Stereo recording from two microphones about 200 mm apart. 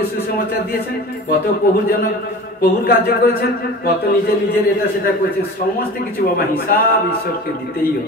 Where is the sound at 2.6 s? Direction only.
50° left (ahead or behind).